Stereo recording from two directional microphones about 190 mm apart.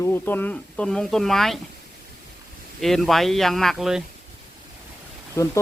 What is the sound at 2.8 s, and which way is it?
Speech, centre (ahead or behind).